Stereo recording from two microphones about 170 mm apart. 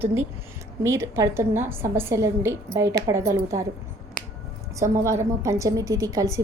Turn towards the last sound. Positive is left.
turn(degrees=-20)  # may be behind; listen again after turning